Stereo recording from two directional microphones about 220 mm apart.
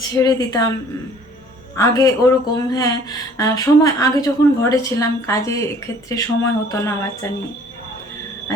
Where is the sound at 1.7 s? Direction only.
15° left (ahead or behind).